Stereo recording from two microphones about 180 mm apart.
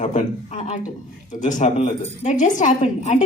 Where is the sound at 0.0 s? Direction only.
40° left (ahead or behind).